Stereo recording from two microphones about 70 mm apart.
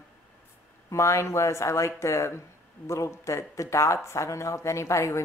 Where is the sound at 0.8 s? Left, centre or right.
Left.